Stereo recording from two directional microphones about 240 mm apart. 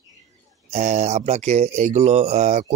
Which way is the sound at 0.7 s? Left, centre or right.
Right.